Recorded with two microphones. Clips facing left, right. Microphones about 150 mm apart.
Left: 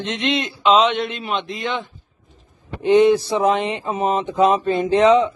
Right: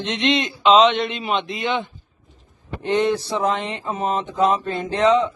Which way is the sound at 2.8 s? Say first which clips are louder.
Left 6 dB; 10° left (ahead or behind).